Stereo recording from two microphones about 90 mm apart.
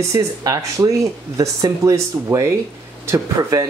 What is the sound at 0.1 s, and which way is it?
Speech, 45° right (ahead or behind).